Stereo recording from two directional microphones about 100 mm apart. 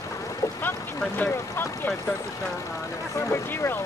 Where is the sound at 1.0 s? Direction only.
20° left (ahead or behind).